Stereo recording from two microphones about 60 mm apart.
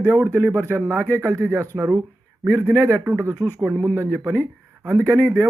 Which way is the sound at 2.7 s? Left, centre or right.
Right.